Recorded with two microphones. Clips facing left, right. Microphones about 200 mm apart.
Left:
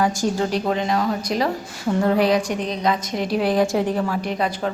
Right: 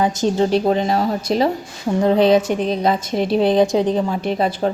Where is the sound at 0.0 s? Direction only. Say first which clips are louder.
Right 4 dB; 20° right (ahead or behind).